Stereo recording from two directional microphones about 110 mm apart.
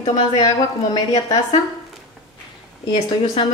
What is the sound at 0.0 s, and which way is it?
A woman's voice, 40° left (ahead or behind).